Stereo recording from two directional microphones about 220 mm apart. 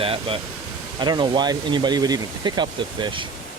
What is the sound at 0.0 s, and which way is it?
Speech, 25° right (ahead or behind).